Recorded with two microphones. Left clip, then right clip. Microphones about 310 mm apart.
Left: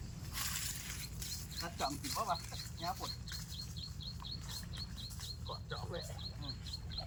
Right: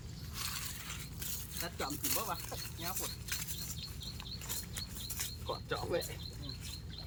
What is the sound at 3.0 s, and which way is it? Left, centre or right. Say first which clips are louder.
Speech: right 3 dB; right.